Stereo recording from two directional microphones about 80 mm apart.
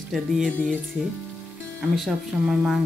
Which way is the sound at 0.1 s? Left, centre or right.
Centre.